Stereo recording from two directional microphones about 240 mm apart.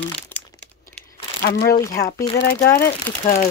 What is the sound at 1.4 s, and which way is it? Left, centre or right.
Speech, left.